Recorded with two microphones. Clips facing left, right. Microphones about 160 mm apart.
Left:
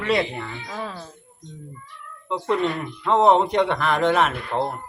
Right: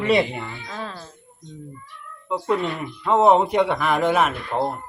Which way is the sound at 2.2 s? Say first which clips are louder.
Even; 5° right (ahead or behind).